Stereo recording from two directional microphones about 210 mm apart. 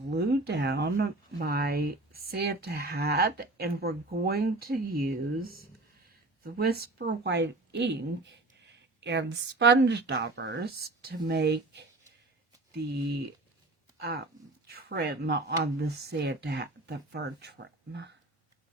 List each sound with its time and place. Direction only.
0.1 s speech: 50° right (ahead or behind)